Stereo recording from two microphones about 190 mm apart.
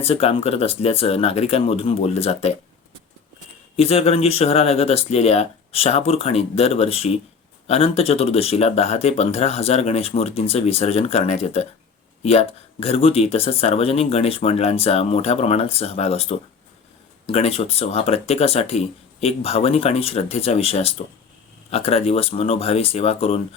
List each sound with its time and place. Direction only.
0.0 s speech: 30° left (ahead or behind)
3.8 s speech: 30° left (ahead or behind)